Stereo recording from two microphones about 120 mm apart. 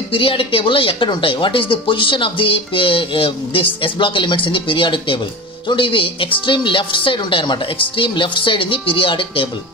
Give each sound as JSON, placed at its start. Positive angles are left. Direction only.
{"t": 0.1, "sound": "speech", "side_deg": 50}